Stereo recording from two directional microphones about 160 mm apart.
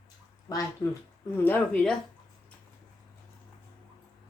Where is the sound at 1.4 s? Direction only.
10° left (ahead or behind).